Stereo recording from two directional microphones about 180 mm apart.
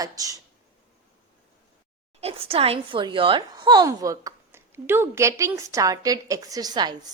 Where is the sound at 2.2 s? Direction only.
35° right (ahead or behind).